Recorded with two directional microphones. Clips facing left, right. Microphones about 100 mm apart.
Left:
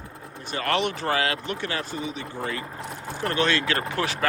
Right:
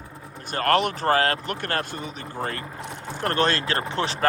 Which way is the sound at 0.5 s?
45° right (ahead or behind).